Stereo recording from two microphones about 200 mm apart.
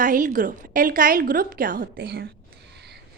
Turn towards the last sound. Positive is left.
turn(degrees=-55)  # may be behind; listen again after turning